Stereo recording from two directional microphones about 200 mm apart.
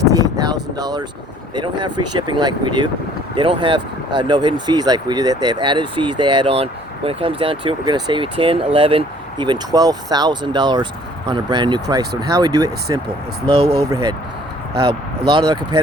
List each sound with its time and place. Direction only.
0.0 s a sound: 15° right (ahead or behind)
1.5 s speech: 20° right (ahead or behind)
15.3 s speech: 20° right (ahead or behind)